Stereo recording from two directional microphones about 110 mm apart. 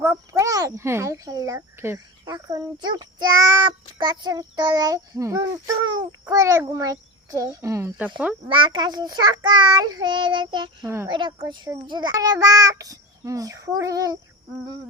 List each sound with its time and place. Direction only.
0.0 s a child's voice: 30° right (ahead or behind)
2.2 s a child's voice: 35° right (ahead or behind)
8.4 s a child's voice: 50° right (ahead or behind)
10.8 s speech: 25° right (ahead or behind)
11.1 s a woman's voice: 45° right (ahead or behind)